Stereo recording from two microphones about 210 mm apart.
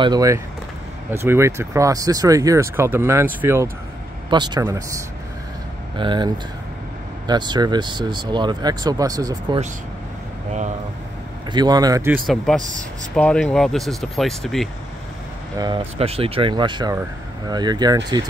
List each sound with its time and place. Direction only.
0.0 s speech: 15° right (ahead or behind)
11.5 s speech: 20° right (ahead or behind)
12.1 s speech: centre (ahead or behind)
12.5 s speech: 35° right (ahead or behind)
13.1 s speech: 5° left (ahead or behind)
15.6 s speech: 25° right (ahead or behind)